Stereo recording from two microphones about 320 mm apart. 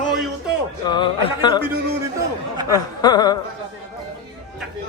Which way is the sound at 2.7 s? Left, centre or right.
Centre.